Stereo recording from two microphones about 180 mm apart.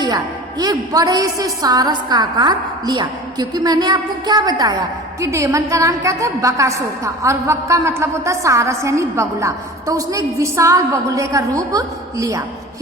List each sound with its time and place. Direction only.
0.6 s a woman's voice: 20° right (ahead or behind)